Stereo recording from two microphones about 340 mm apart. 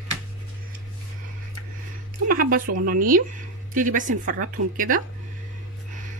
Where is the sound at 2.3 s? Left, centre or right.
Right.